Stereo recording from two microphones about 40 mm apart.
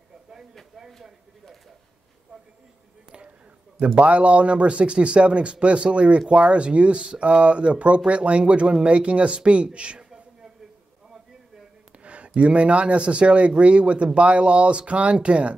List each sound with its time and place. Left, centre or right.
3.1 s speech: right
12.0 s a sound: right
12.4 s speech: right